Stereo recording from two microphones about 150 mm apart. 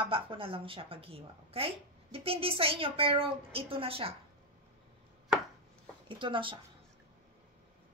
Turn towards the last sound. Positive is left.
turn(degrees=-35)  # may be behind; listen again after turning